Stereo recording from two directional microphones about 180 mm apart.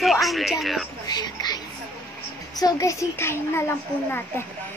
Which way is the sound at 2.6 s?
20° left (ahead or behind).